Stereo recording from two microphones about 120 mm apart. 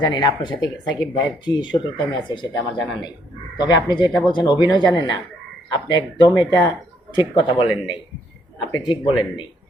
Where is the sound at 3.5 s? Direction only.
35° left (ahead or behind).